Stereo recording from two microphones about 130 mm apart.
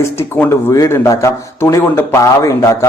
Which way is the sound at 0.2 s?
20° left (ahead or behind).